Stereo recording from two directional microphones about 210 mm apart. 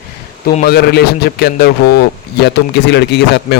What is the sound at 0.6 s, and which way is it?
A man's voice, 50° left (ahead or behind).